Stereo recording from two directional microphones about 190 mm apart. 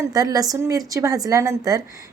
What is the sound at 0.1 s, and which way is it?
A woman's voice, 20° right (ahead or behind).